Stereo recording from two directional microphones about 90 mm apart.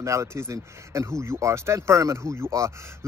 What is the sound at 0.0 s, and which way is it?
Speech, 35° right (ahead or behind).